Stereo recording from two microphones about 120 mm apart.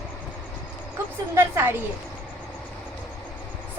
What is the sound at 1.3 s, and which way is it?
Speech, 20° right (ahead or behind).